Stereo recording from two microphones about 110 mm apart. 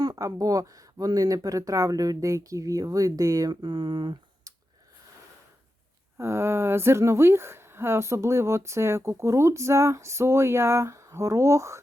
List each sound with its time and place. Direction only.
0.1 s speech: 30° right (ahead or behind)
6.1 s speech: 25° right (ahead or behind)